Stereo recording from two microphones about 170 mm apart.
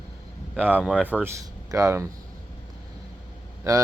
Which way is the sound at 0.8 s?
5° right (ahead or behind).